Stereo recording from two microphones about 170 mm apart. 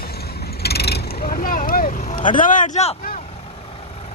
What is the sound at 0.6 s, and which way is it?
Vehicle, 70° left (ahead or behind).